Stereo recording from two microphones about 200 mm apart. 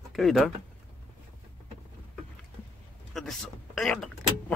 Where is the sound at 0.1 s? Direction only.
Centre (ahead or behind).